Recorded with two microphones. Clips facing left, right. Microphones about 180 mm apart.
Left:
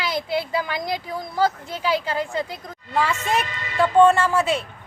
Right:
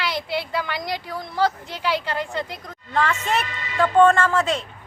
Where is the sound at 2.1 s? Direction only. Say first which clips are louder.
Left 2 dB; 5° left (ahead or behind).